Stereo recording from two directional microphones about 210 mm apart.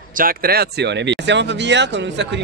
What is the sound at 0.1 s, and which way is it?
Speech, 45° right (ahead or behind).